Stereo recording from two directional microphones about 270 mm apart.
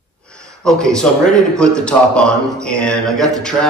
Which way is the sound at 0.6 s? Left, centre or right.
Centre.